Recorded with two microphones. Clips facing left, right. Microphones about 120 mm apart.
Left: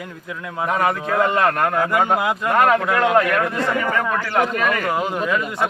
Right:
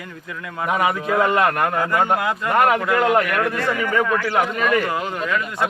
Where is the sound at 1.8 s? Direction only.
15° left (ahead or behind).